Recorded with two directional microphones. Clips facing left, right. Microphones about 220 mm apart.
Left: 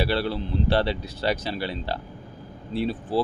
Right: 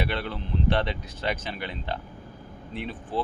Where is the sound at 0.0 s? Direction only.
35° left (ahead or behind).